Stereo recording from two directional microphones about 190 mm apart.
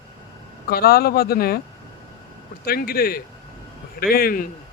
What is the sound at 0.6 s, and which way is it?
Speech, 55° left (ahead or behind).